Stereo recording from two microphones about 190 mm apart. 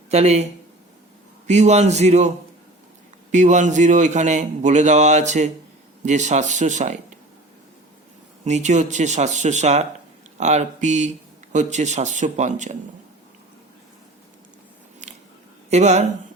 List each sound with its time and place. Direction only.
0.1 s a man's voice: 35° right (ahead or behind)
1.5 s a man's voice: 35° right (ahead or behind)
3.3 s a man's voice: 40° right (ahead or behind)
8.4 s a man's voice: 40° right (ahead or behind)
15.0 s biting: 40° right (ahead or behind)
15.7 s a man's voice: 35° right (ahead or behind)